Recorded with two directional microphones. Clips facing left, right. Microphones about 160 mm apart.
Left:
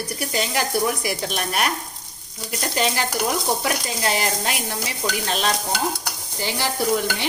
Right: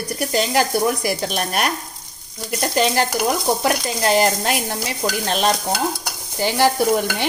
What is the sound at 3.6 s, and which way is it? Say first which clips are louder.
Sizzle: right 5 dB; 50° right (ahead or behind).